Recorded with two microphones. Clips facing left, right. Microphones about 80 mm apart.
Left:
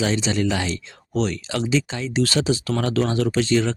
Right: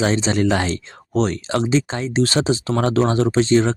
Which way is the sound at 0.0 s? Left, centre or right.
Right.